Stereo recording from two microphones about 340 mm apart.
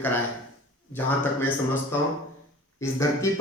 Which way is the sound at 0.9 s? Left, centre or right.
Centre.